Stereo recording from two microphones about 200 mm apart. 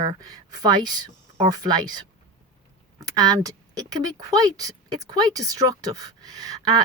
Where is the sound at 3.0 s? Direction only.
20° right (ahead or behind).